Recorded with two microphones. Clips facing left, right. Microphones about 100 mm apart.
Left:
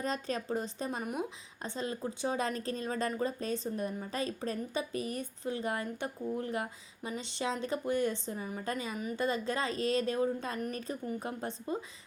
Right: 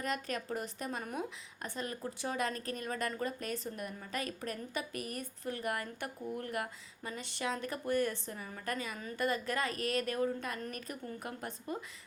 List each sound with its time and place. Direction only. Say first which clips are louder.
0.0 s a woman's voice: left 2 dB; 30° left (ahead or behind)